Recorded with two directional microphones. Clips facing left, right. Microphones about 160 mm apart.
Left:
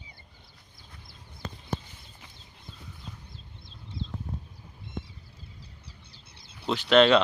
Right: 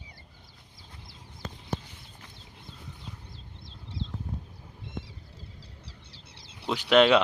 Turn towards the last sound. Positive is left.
turn(degrees=-10)  # may be behind; listen again after turning